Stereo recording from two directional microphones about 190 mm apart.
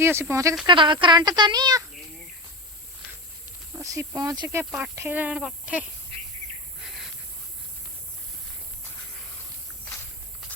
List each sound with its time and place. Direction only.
0.0 s speech: 15° right (ahead or behind)
0.7 s speech: 25° right (ahead or behind)
3.8 s speech: 15° right (ahead or behind)
6.8 s a sound: centre (ahead or behind)